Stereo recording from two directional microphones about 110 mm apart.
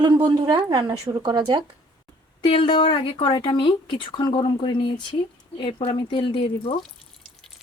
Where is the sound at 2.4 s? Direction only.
55° left (ahead or behind).